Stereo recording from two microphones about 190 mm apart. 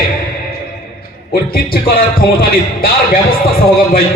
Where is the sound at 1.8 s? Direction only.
50° left (ahead or behind).